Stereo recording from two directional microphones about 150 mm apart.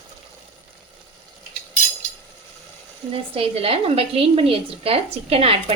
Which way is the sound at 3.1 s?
40° right (ahead or behind).